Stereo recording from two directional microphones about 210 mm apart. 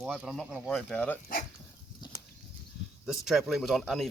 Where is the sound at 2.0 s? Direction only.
20° left (ahead or behind).